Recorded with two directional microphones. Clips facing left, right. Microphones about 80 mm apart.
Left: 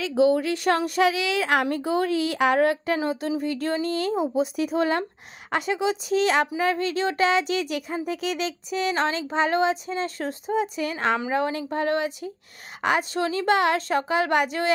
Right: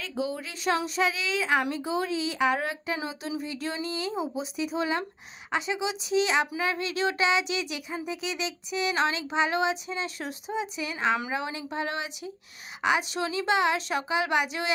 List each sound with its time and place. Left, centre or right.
0.2 s speech: left
3.1 s a woman's voice: left
4.1 s speech: centre
4.6 s a woman's voice: left